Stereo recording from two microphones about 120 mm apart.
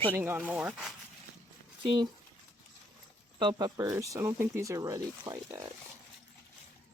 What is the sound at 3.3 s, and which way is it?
Speech, 35° right (ahead or behind).